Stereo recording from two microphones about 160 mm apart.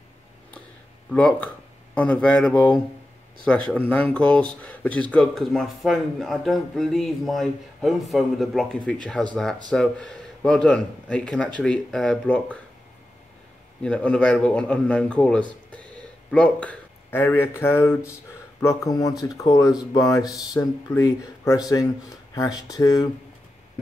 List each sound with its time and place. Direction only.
1.1 s speech: 10° left (ahead or behind)
13.8 s speech: 5° left (ahead or behind); by 23.0 s 20° left (ahead or behind)